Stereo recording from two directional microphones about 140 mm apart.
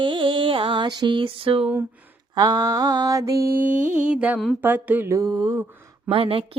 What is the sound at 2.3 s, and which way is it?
Mantra, 30° right (ahead or behind).